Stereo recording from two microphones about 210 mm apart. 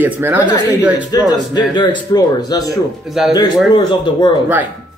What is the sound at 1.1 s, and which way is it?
Speech, 20° left (ahead or behind).